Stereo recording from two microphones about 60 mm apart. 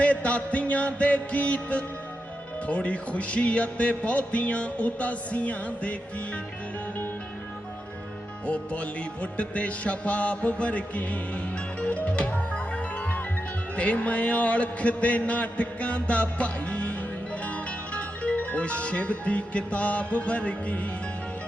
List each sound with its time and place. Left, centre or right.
0.0 s music: left
8.4 s music: left
17.9 s speech: centre